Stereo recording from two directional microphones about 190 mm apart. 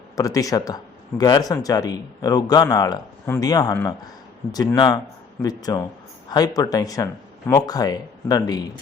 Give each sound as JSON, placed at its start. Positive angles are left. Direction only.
{"t": 0.2, "sound": "speech", "side_deg": 20}